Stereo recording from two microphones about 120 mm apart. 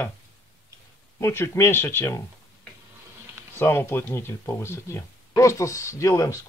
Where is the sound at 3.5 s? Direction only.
20° left (ahead or behind).